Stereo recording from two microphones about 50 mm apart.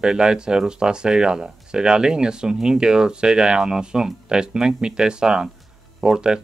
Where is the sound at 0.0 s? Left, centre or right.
Centre.